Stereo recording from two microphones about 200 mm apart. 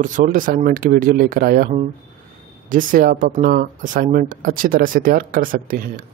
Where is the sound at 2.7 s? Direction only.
45° right (ahead or behind).